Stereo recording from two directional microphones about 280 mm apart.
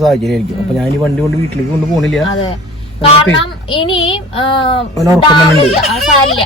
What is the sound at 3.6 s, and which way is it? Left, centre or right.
A child's voice, centre.